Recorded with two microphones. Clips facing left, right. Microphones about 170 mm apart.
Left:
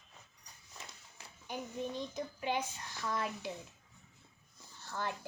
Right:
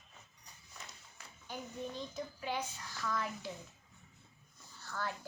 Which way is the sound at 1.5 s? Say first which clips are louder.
Left 3 dB; 20° left (ahead or behind).